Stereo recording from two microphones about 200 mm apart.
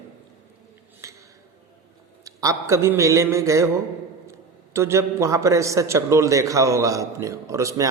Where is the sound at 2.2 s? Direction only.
15° right (ahead or behind).